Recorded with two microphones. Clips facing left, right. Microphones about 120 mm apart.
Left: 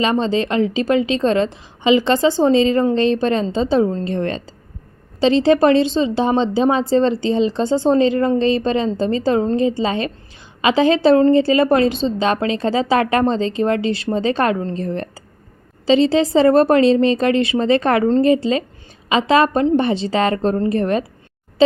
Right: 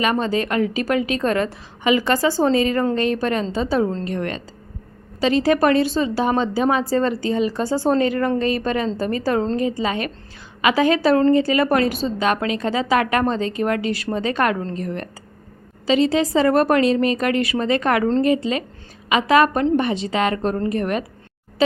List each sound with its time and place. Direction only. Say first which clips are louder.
0.0 s a woman's voice: left 3 dB; 25° left (ahead or behind)